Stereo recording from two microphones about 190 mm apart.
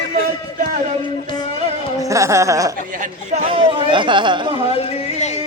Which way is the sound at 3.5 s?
25° right (ahead or behind).